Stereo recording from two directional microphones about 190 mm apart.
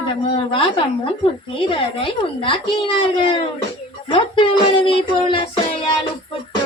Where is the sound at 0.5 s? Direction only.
30° left (ahead or behind).